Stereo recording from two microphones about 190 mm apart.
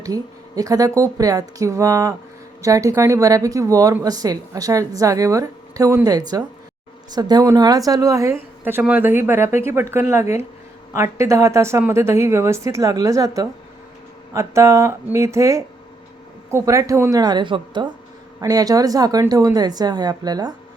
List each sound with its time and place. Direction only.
0.0 s a woman's voice: 20° right (ahead or behind)